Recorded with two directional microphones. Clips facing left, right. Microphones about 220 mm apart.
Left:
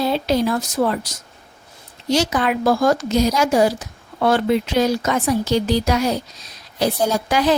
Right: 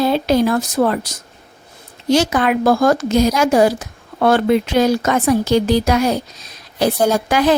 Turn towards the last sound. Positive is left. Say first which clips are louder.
# right 3 dB
turn(degrees=-55)  # may be behind; listen again after turning